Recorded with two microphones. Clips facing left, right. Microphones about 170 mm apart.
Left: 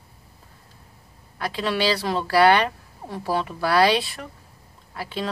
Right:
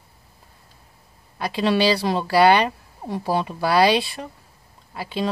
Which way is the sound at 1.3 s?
20° right (ahead or behind).